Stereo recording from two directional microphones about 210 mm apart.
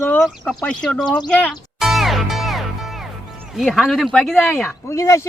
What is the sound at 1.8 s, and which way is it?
Music, centre (ahead or behind).